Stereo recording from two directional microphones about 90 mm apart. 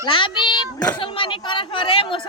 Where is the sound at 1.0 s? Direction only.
70° left (ahead or behind).